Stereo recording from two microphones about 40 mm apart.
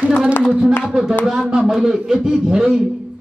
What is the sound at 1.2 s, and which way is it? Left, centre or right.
A man's voice, centre.